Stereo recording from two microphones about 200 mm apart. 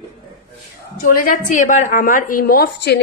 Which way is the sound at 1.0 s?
45° left (ahead or behind).